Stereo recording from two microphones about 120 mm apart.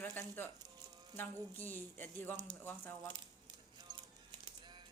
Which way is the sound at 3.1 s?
40° right (ahead or behind).